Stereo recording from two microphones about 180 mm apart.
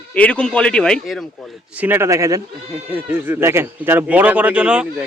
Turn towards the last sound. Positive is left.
turn(degrees=-5)  # may be behind; listen again after turning